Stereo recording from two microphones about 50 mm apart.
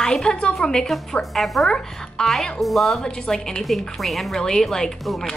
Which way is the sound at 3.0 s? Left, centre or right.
Centre.